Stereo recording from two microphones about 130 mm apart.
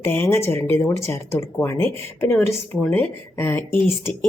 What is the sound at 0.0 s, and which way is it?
Speech, 20° left (ahead or behind).